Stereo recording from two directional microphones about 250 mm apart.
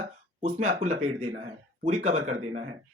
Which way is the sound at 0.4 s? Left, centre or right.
Right.